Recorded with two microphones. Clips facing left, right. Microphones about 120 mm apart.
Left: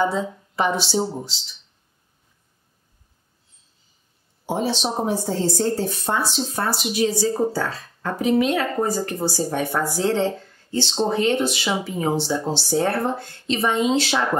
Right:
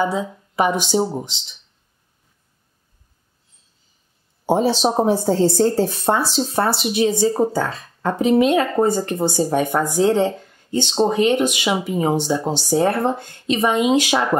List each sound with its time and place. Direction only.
0.0 s speech: 10° right (ahead or behind)
4.5 s speech: 35° right (ahead or behind); by 14.2 s 15° right (ahead or behind)